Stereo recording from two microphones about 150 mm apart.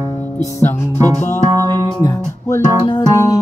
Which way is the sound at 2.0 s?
25° left (ahead or behind).